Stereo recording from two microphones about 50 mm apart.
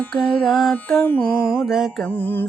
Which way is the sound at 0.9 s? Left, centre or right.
Left.